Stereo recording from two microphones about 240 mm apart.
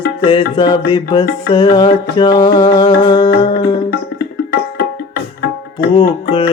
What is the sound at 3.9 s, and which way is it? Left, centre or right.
Music, left.